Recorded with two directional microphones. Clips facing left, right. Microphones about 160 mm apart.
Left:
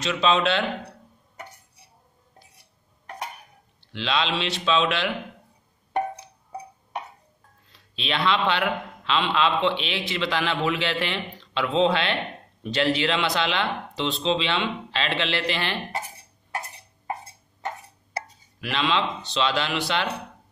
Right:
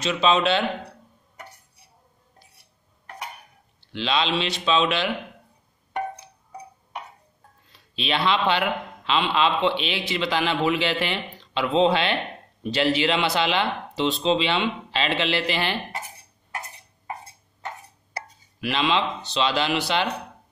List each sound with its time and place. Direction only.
0.0 s a man's voice: 5° right (ahead or behind)
3.9 s a man's voice: centre (ahead or behind)
7.9 s a man's voice: 5° right (ahead or behind)
18.6 s a man's voice: 5° right (ahead or behind)